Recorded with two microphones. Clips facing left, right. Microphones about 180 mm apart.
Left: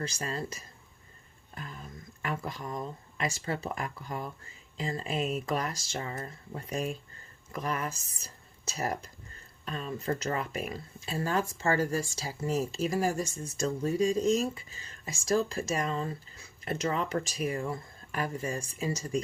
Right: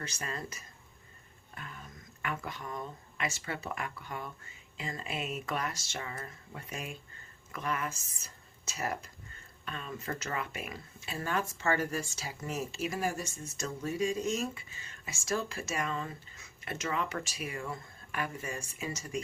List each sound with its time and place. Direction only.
0.0 s speech: 35° left (ahead or behind)